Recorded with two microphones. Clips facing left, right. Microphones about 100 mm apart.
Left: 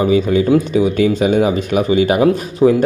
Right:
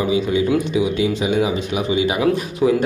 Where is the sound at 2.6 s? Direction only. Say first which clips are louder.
Left 5 dB; 30° left (ahead or behind).